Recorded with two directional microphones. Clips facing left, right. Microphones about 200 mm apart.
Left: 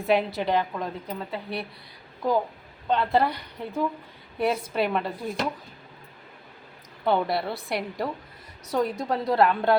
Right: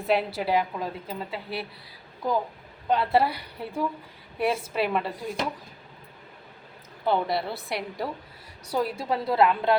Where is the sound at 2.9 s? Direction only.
5° right (ahead or behind).